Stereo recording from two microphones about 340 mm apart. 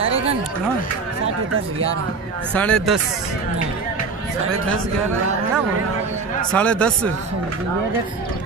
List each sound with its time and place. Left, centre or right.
1.5 s speech: right
2.5 s speech: centre
6.5 s speech: centre